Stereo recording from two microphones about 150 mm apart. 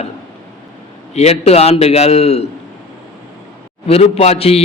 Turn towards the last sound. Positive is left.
turn(degrees=40)  # may be behind; listen again after turning